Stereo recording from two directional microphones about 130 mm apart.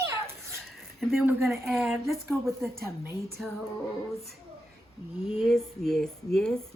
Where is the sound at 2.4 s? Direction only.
20° right (ahead or behind).